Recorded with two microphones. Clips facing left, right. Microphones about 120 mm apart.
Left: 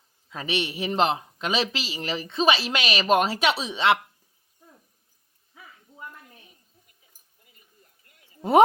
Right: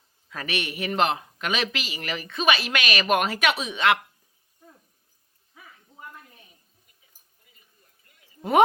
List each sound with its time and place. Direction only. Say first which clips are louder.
0.3 s speech: left 2 dB; 25° left (ahead or behind)